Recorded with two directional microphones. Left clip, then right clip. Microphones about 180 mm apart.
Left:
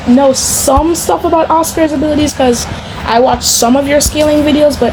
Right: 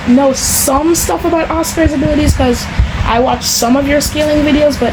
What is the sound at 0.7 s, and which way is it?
Speech, 25° left (ahead or behind).